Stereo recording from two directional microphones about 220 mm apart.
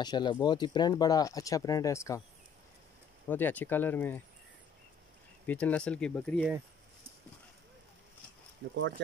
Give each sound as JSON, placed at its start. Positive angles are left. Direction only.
{"t": 0.0, "sound": "speech", "side_deg": 20}
{"t": 3.3, "sound": "speech", "side_deg": 10}
{"t": 5.5, "sound": "speech", "side_deg": 5}